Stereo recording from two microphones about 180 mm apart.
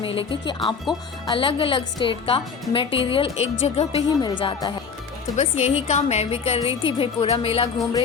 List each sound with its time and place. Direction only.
0.0 s a woman's voice: 30° left (ahead or behind)
5.4 s a woman's voice: 35° left (ahead or behind)